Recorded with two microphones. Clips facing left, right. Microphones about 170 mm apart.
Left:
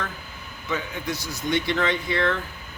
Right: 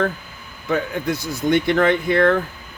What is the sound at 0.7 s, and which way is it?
Cutlery, 50° right (ahead or behind).